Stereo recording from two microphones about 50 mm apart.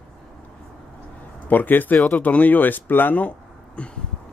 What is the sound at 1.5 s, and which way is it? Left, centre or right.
Speech, left.